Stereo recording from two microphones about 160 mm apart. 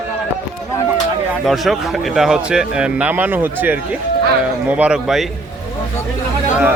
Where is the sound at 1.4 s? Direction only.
Centre (ahead or behind).